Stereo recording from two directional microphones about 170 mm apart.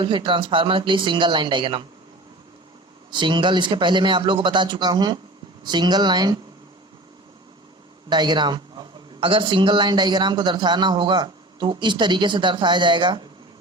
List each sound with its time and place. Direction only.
0.0 s speech: 30° right (ahead or behind)
3.1 s speech: 25° right (ahead or behind)
8.1 s speech: 25° right (ahead or behind)